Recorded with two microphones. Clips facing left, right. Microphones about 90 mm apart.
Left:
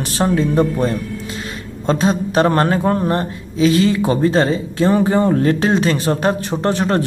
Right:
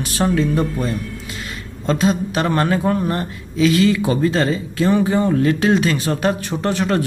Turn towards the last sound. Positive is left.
turn(degrees=35)  # may be behind; listen again after turning